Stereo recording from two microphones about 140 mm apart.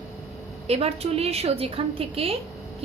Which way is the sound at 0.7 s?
45° right (ahead or behind).